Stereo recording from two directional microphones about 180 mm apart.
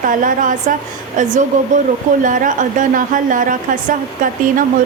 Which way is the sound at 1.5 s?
45° right (ahead or behind).